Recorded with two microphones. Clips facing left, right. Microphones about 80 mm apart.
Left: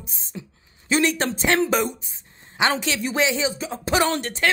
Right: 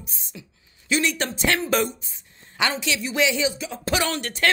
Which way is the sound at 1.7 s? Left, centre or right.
Centre.